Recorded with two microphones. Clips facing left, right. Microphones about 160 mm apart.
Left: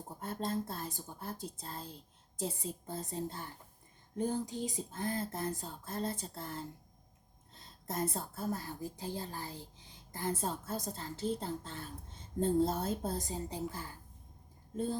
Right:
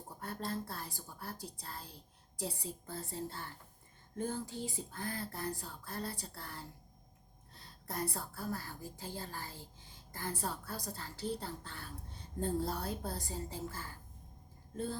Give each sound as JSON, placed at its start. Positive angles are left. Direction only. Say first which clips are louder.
{"t": 0.2, "sound": "a woman's voice", "louder": "left 4 dB", "side_deg": 20}